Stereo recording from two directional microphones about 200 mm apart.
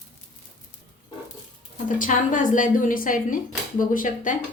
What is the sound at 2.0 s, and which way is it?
A woman's voice, 40° left (ahead or behind).